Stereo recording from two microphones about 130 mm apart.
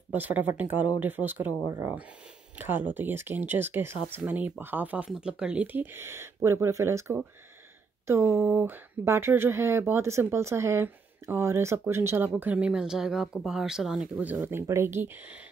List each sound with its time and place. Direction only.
0.1 s speech: 15° right (ahead or behind)